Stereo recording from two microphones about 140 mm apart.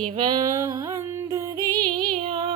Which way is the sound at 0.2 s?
30° right (ahead or behind).